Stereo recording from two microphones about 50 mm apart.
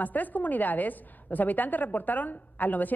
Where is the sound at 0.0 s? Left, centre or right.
Left.